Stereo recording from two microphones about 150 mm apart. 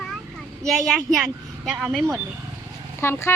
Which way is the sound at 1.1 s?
Centre (ahead or behind).